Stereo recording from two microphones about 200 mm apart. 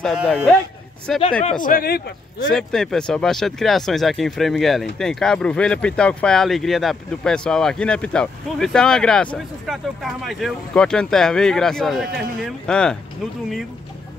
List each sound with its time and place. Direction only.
0.0 s speech: centre (ahead or behind)
1.6 s speech: 45° left (ahead or behind)
2.5 s speech: centre (ahead or behind)